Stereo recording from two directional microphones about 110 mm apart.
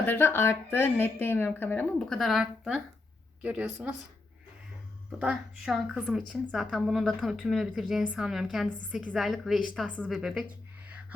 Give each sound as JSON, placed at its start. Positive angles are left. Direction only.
{"t": 0.0, "sound": "a woman's voice", "side_deg": 20}
{"t": 2.0, "sound": "a woman's voice", "side_deg": 0}
{"t": 5.2, "sound": "a woman's voice", "side_deg": -10}
{"t": 9.1, "sound": "a woman's voice", "side_deg": 0}